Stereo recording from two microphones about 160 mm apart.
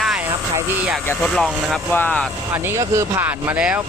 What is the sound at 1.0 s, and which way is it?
Speech, 15° left (ahead or behind).